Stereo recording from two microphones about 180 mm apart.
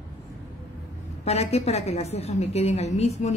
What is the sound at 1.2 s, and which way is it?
A woman's voice, 35° left (ahead or behind).